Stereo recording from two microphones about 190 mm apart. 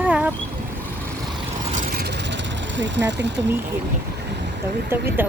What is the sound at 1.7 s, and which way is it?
Vehicle, 50° right (ahead or behind).